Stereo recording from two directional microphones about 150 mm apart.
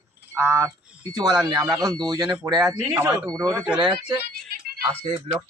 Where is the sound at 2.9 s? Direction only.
15° right (ahead or behind); by 4.1 s 30° right (ahead or behind).